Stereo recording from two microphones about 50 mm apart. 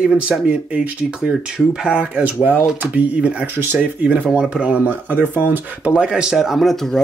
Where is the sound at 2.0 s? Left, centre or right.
Right.